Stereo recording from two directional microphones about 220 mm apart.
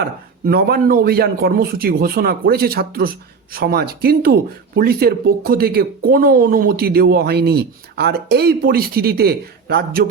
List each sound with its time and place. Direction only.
0.0 s speech: 45° right (ahead or behind)